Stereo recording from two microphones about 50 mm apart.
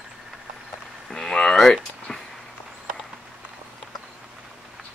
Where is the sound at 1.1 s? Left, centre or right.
Centre.